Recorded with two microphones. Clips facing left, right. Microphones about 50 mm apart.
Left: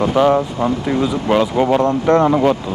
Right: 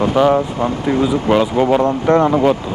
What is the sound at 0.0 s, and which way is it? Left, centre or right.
Speech, centre.